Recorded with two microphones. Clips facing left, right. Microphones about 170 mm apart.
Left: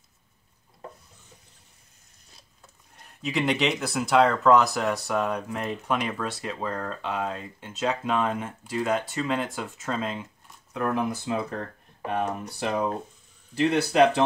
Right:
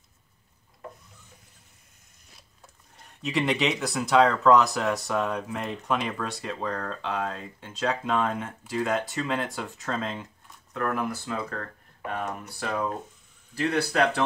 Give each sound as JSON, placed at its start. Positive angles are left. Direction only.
{"t": 3.2, "sound": "speech", "side_deg": 0}
{"t": 10.7, "sound": "speech", "side_deg": 15}